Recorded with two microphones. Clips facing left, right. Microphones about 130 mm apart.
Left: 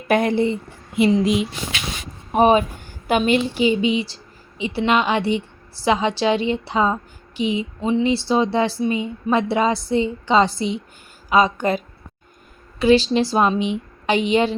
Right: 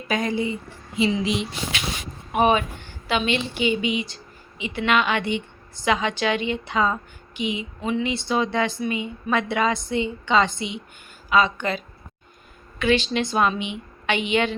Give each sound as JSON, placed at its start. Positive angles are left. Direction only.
{"t": 0.1, "sound": "speech", "side_deg": 60}
{"t": 2.3, "sound": "a woman's voice", "side_deg": 35}
{"t": 12.8, "sound": "a woman's voice", "side_deg": 35}